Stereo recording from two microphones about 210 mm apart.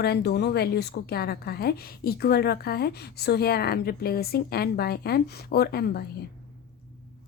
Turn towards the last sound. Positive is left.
turn(degrees=50)  # may be behind; listen again after turning